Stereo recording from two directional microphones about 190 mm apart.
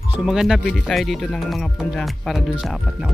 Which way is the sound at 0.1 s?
5° right (ahead or behind).